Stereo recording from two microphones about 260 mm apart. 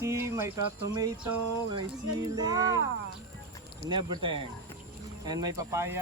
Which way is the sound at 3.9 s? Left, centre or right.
Centre.